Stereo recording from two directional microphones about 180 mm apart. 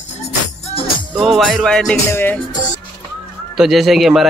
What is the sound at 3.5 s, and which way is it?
Speech, centre (ahead or behind).